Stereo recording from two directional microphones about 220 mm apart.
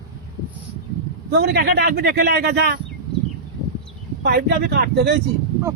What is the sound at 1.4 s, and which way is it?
Speech, 45° right (ahead or behind).